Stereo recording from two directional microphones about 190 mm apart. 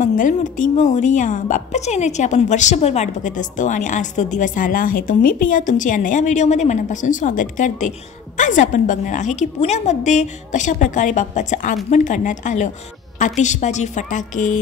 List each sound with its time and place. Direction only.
0.0 s a woman's voice: 40° left (ahead or behind)